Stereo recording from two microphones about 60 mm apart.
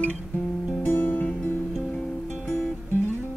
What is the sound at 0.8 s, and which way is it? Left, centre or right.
Music, left.